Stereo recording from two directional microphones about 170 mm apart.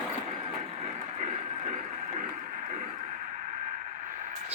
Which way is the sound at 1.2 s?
50° right (ahead or behind).